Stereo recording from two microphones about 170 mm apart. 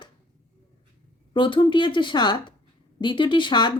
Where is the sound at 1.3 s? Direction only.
30° left (ahead or behind).